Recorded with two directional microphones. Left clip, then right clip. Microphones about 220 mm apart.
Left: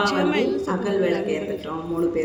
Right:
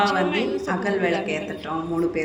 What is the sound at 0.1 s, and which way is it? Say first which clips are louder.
A woman's voice: left 1 dB; 5° left (ahead or behind).